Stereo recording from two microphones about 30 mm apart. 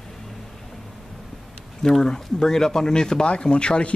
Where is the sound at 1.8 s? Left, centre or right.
Centre.